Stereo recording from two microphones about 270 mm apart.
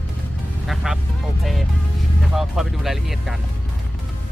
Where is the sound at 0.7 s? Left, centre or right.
Centre.